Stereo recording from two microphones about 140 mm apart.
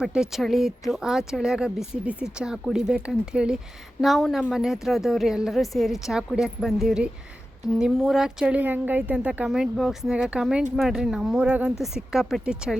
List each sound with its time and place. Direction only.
0.0 s a woman's voice: 5° right (ahead or behind)